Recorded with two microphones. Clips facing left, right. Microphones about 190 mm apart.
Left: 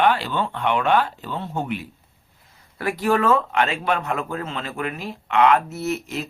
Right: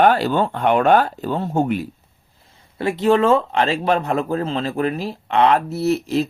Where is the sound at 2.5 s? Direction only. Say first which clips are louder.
Right 4 dB; 25° right (ahead or behind).